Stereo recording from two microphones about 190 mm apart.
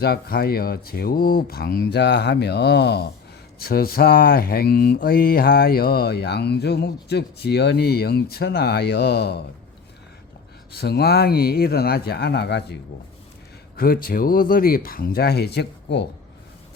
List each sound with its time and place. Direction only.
0.0 s speech: 55° left (ahead or behind)
10.7 s speech: 60° left (ahead or behind)
13.7 s speech: 50° left (ahead or behind)